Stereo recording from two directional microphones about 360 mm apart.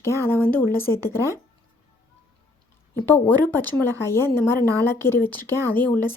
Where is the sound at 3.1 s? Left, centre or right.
Centre.